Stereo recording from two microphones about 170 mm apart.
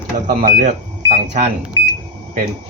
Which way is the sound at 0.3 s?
55° right (ahead or behind).